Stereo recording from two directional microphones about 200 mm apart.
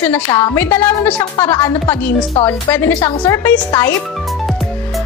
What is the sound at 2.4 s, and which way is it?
Speech, 20° left (ahead or behind).